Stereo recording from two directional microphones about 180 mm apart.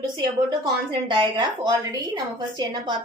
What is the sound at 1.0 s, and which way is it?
A woman's voice, 25° right (ahead or behind).